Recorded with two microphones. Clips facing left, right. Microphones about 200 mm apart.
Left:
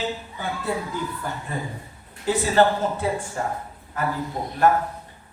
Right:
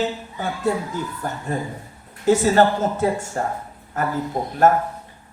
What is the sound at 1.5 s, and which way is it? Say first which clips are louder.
A man's voice: right 4 dB; 45° right (ahead or behind).